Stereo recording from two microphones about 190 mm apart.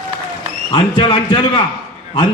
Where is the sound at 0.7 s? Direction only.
25° left (ahead or behind).